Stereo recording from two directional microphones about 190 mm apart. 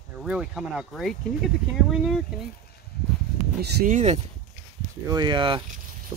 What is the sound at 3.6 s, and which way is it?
Speech, 60° right (ahead or behind).